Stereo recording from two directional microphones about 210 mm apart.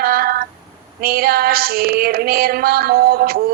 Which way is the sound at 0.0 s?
45° right (ahead or behind).